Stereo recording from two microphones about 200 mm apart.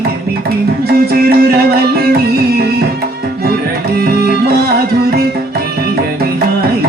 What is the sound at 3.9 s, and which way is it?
Music, 50° right (ahead or behind).